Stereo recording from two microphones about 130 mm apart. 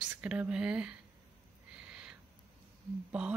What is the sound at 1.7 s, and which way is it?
Owl, 10° right (ahead or behind).